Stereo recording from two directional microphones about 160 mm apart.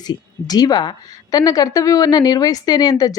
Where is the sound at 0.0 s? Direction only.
25° left (ahead or behind).